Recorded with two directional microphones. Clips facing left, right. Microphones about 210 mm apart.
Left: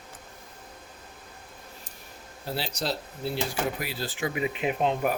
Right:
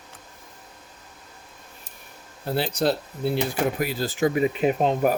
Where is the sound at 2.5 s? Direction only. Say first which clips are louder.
Right 8 dB; 55° right (ahead or behind).